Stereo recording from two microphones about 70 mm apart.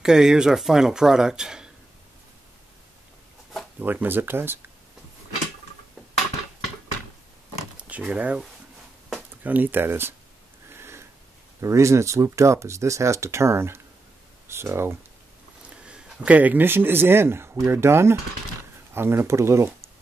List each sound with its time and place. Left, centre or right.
0.0 s speech: centre
3.8 s speech: right
7.9 s speech: right
9.4 s speech: right
10.7 s sniff: right
11.6 s speech: right
15.8 s a man's voice: centre; by 19.7 s right